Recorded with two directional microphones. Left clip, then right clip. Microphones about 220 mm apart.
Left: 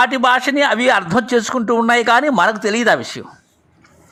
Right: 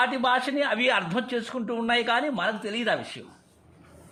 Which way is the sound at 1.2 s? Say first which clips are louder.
Left 13 dB; 35° left (ahead or behind).